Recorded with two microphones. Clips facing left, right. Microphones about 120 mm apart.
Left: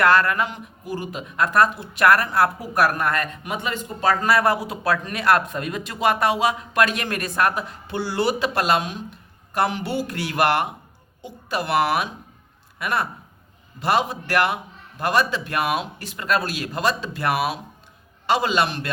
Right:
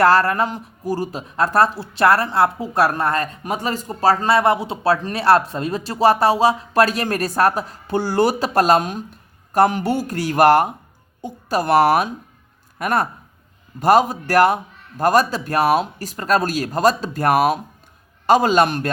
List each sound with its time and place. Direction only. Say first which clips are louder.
0.0 s a man's voice: right 3 dB; 35° right (ahead or behind)